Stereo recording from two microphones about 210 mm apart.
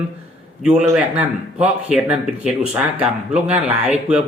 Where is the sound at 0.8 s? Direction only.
5° right (ahead or behind).